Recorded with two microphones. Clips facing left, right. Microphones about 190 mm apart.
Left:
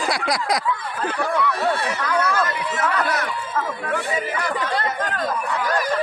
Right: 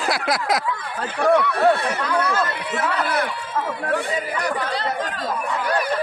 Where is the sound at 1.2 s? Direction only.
65° right (ahead or behind).